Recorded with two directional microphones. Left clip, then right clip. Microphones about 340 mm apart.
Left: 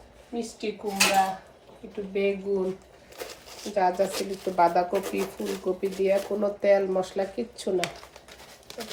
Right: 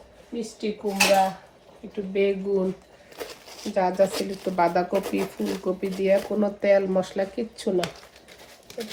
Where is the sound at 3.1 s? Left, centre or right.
Centre.